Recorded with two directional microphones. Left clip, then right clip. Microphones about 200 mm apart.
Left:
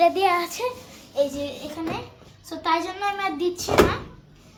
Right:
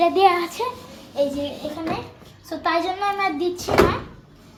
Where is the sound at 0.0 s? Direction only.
15° left (ahead or behind).